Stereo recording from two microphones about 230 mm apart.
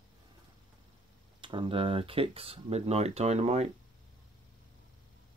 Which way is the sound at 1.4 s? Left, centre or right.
Right.